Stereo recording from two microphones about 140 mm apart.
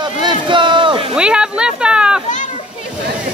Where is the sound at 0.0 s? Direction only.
35° right (ahead or behind).